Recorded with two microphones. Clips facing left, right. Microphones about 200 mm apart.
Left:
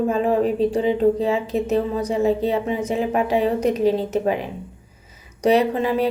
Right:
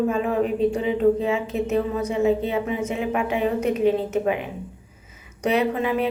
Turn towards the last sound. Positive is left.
turn(degrees=35)  # may be behind; listen again after turning